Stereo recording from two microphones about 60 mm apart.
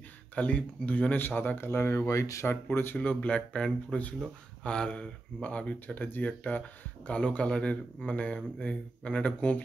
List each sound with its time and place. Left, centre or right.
0.4 s speech: left
2.4 s speech: left
3.0 s speech: left